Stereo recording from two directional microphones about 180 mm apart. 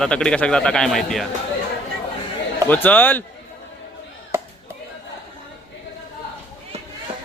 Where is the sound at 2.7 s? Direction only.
10° left (ahead or behind).